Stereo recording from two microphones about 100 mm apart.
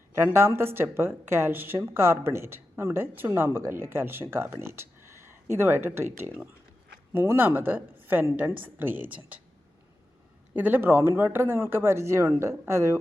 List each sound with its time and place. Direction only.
0.1 s speech: 25° right (ahead or behind)
10.5 s speech: 15° right (ahead or behind)